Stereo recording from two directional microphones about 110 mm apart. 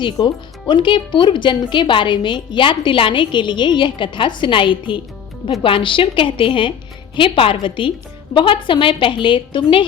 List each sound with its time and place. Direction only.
0.2 s a woman's voice: 40° left (ahead or behind)